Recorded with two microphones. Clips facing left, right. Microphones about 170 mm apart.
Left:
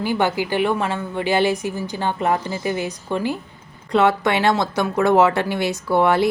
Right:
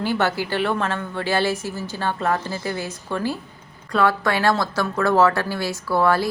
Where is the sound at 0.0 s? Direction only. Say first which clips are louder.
Left 2 dB; 15° left (ahead or behind).